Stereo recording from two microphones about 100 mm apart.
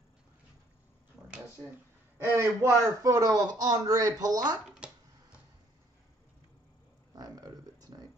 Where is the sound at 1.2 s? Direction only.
30° right (ahead or behind).